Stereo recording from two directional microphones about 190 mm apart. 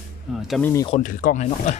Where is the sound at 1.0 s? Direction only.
40° left (ahead or behind).